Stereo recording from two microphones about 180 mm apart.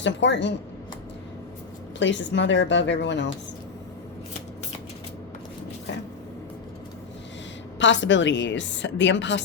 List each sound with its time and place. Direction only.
0.0 s a woman's voice: 80° left
2.0 s a woman's voice: 85° left
7.8 s a woman's voice: 90° left